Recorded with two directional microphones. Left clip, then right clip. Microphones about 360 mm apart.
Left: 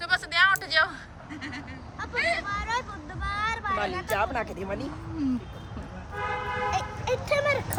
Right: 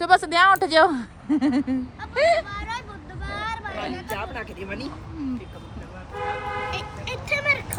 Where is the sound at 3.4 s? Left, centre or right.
Left.